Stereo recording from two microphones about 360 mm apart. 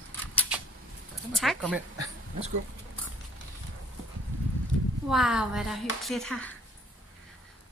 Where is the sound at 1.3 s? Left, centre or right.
Centre.